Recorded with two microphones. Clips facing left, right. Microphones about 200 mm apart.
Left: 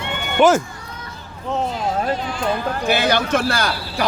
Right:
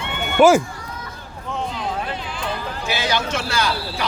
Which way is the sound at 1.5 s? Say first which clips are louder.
Left 4 dB; 40° left (ahead or behind).